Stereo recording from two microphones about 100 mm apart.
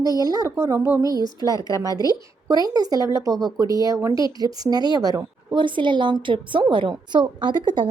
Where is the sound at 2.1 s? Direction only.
40° right (ahead or behind).